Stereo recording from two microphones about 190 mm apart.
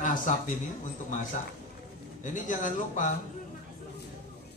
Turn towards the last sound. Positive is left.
turn(degrees=45)  # may be behind; listen again after turning